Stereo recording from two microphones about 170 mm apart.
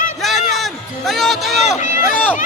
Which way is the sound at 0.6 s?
Centre (ahead or behind).